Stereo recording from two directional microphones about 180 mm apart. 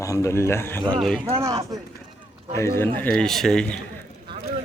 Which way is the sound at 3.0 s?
5° left (ahead or behind).